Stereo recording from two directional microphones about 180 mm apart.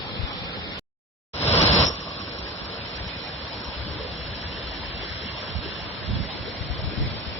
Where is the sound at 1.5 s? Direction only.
35° left (ahead or behind).